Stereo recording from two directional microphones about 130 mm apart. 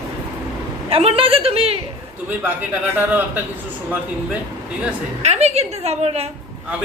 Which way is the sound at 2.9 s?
15° right (ahead or behind).